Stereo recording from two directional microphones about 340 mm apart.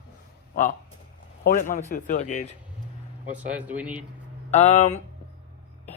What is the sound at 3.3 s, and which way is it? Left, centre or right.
Speech, centre.